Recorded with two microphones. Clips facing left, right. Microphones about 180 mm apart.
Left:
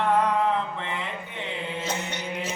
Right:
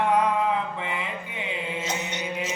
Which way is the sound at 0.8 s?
10° right (ahead or behind).